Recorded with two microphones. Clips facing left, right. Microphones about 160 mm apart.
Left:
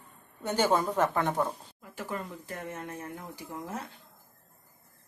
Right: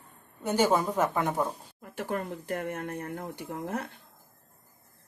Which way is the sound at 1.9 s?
65° right (ahead or behind).